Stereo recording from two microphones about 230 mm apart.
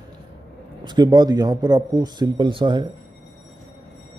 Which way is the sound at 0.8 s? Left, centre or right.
Centre.